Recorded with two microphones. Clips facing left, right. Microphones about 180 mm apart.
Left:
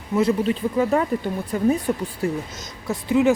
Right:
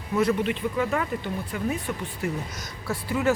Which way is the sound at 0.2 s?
30° left (ahead or behind).